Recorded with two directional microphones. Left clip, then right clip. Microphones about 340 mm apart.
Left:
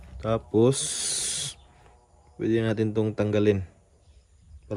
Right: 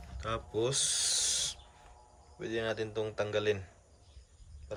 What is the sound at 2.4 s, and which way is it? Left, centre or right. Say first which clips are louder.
Speech: left 9 dB; centre.